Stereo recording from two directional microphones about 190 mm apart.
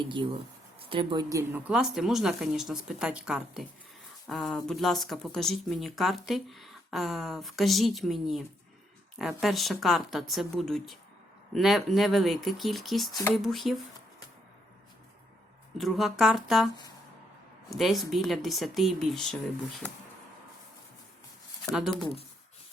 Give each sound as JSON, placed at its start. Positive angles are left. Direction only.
{"t": 0.0, "sound": "speech", "side_deg": -25}
{"t": 15.8, "sound": "speech", "side_deg": 0}
{"t": 17.7, "sound": "speech", "side_deg": 0}